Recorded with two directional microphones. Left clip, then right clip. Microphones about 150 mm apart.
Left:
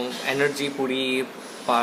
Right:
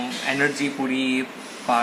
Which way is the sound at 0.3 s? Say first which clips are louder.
Right 1 dB; 45° left (ahead or behind).